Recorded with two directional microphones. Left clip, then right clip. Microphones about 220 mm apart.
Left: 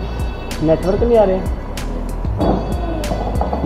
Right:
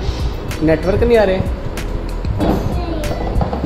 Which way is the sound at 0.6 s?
25° right (ahead or behind).